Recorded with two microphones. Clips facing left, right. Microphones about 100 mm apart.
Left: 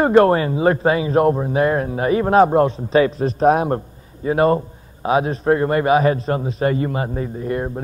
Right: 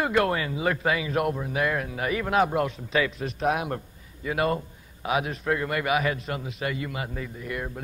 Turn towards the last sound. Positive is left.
turn(degrees=35)  # may be behind; listen again after turning